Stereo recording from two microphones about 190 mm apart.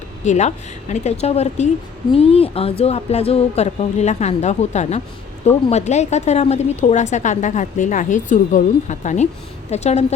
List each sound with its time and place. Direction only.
0.3 s speech: 35° left (ahead or behind)